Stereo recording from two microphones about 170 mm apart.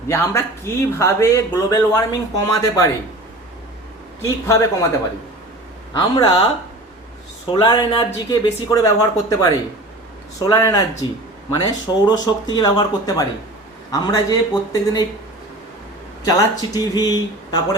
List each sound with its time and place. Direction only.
0.1 s speech: 15° left (ahead or behind)
4.4 s speech: 20° left (ahead or behind)
5.9 s speech: 25° left (ahead or behind)
7.5 s speech: 25° left (ahead or behind)
16.2 s speech: 20° left (ahead or behind)